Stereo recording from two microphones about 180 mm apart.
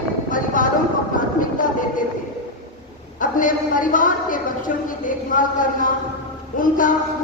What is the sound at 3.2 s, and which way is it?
A woman's voice, 50° left (ahead or behind).